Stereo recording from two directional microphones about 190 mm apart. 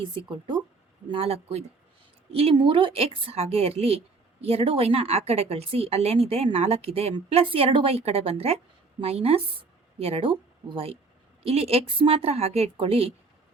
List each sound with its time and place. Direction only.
0.0 s speech: 25° right (ahead or behind)